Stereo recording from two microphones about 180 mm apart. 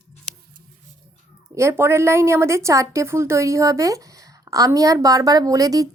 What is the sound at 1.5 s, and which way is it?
A woman's voice, 15° right (ahead or behind).